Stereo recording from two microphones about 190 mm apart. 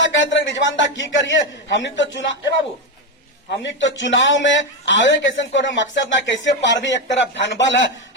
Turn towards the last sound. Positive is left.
turn(degrees=70)  # may be behind; listen again after turning